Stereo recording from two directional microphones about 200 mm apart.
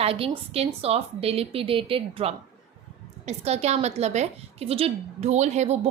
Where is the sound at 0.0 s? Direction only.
30° right (ahead or behind).